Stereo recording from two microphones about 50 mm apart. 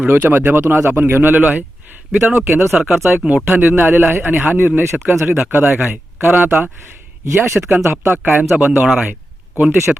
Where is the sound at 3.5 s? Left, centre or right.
Right.